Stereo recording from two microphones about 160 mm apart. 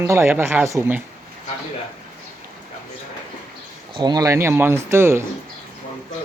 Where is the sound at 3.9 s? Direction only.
30° right (ahead or behind).